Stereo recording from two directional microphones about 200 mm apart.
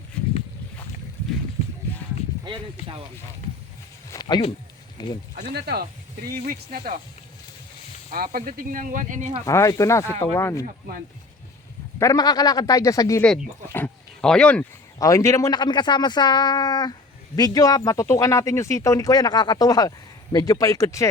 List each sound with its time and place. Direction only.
4.1 s speech: 20° left (ahead or behind)
5.4 s speech: 50° right (ahead or behind)
8.1 s speech: 45° right (ahead or behind)
9.5 s speech: 15° left (ahead or behind)
11.9 s speech: 15° left (ahead or behind)
13.2 s speech: 5° left (ahead or behind)
14.9 s speech: 15° left (ahead or behind)